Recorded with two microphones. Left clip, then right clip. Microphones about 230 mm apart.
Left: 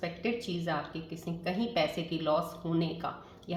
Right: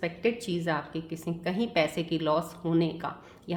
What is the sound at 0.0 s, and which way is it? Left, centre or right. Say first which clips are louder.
Speech: right 5 dB; right.